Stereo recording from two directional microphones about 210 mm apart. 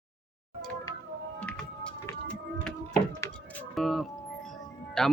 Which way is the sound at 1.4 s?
5° left (ahead or behind).